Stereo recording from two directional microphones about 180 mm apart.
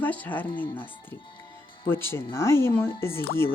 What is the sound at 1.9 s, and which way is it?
Speech, 15° left (ahead or behind).